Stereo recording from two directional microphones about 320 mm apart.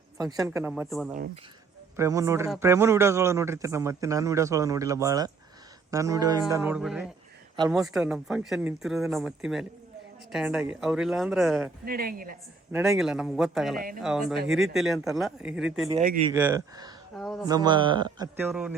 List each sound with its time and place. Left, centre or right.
0.2 s a man's voice: centre
11.9 s a woman's voice: right
12.7 s speech: centre
15.9 s a woman's voice: right
16.3 s a man's voice: centre
17.2 s speech: centre
17.4 s a man's voice: centre